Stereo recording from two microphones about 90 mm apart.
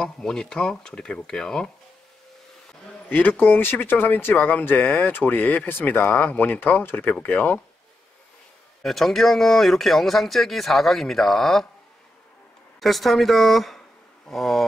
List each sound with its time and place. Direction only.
0.0 s speech: 5° left (ahead or behind)
3.1 s speech: 20° left (ahead or behind)
8.8 s speech: 5° left (ahead or behind)
12.8 s speech: centre (ahead or behind)